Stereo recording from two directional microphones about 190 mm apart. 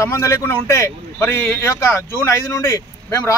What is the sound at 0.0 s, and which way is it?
A man's voice, 15° left (ahead or behind).